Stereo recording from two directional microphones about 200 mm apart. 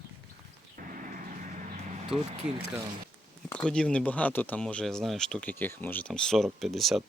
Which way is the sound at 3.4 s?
5° left (ahead or behind).